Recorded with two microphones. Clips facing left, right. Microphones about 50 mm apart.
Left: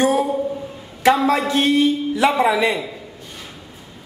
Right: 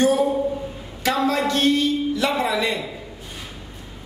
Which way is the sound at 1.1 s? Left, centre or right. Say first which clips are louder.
Left 4 dB; centre.